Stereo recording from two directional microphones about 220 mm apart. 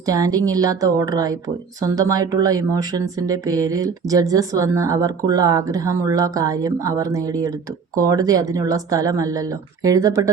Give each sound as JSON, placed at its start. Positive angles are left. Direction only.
{"t": 0.0, "sound": "speech", "side_deg": -15}